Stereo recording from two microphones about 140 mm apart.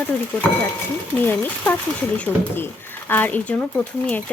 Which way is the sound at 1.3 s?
15° left (ahead or behind).